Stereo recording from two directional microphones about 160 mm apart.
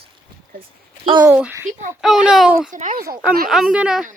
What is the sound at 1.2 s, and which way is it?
A child's voice, 10° right (ahead or behind).